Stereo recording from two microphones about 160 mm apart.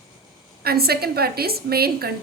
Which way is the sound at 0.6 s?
75° right (ahead or behind).